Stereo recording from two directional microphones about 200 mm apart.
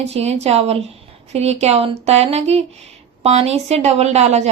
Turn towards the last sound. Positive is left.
turn(degrees=-35)  # may be behind; listen again after turning